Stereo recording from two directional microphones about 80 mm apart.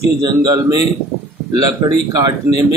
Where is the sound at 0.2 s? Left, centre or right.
Right.